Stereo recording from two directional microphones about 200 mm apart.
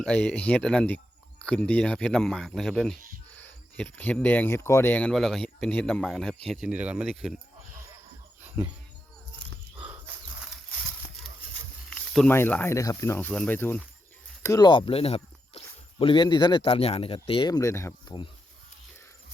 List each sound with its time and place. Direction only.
0.0 s speech: 5° left (ahead or behind)
8.4 s cricket: 15° right (ahead or behind)
9.7 s a sound: 10° right (ahead or behind)
11.9 s speech: 5° left (ahead or behind)